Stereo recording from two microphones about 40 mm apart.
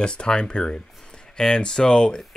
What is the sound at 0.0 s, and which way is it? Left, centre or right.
Speech, left.